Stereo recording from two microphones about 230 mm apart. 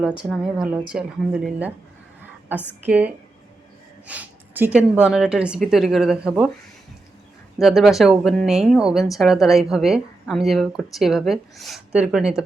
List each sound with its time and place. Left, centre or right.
0.0 s speech: centre
7.6 s speech: centre